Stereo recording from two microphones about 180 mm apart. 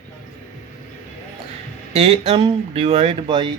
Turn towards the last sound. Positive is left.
turn(degrees=-35)  # may be behind; listen again after turning